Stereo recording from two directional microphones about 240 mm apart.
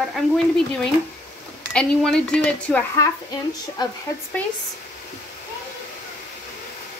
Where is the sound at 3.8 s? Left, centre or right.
Centre.